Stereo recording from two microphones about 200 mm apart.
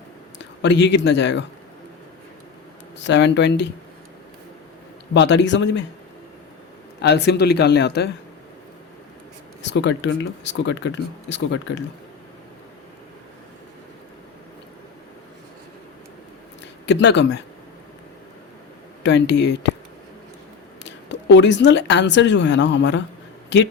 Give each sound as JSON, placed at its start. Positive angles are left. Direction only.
{"t": 0.6, "sound": "speech", "side_deg": 60}
{"t": 3.0, "sound": "speech", "side_deg": 60}
{"t": 5.1, "sound": "speech", "side_deg": 60}
{"t": 7.0, "sound": "speech", "side_deg": 55}
{"t": 9.7, "sound": "speech", "side_deg": 60}
{"t": 16.8, "sound": "speech", "side_deg": 60}
{"t": 19.0, "sound": "speech", "side_deg": 60}
{"t": 20.8, "sound": "a woman's voice", "side_deg": 60}